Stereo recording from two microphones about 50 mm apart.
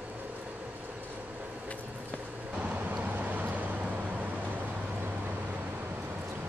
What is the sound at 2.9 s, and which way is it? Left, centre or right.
Vehicle, right.